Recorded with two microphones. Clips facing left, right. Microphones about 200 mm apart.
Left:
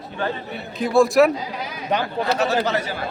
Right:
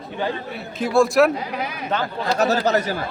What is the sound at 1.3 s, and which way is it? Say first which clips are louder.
Speech: right 2 dB; 60° right (ahead or behind).